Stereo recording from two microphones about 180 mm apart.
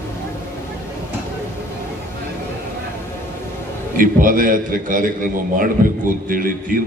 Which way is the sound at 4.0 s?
50° right (ahead or behind).